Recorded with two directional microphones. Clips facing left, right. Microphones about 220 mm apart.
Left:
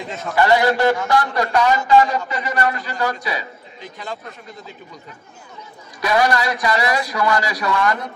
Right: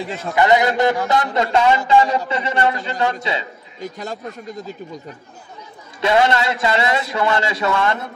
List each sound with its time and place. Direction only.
0.3 s a man's voice: 20° right (ahead or behind)
3.8 s speech: 45° right (ahead or behind)
5.9 s a man's voice: 25° right (ahead or behind)